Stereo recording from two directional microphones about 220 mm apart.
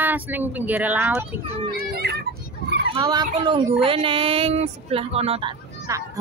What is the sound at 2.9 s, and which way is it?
Speech, 15° right (ahead or behind).